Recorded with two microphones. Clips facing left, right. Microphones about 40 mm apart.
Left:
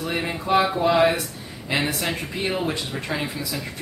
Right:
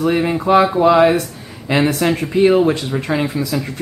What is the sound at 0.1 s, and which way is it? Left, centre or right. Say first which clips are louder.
Speech: right 6 dB; centre.